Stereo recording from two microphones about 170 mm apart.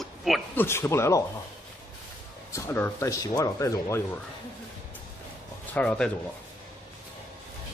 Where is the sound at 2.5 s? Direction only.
15° left (ahead or behind).